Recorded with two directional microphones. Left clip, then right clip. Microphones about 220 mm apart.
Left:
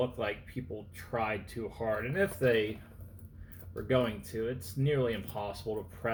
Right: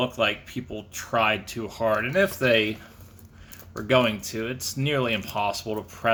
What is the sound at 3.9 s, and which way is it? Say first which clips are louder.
Speech: right 9 dB; 45° right (ahead or behind).